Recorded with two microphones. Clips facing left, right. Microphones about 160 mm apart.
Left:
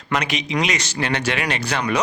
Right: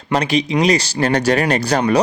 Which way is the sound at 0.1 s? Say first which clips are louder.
Right 6 dB; 35° right (ahead or behind).